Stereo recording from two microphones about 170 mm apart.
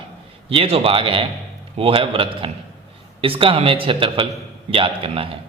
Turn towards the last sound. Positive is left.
turn(degrees=-30)  # may be behind; listen again after turning